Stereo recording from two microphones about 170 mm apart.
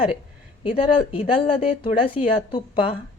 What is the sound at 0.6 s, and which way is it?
Speech, 30° left (ahead or behind).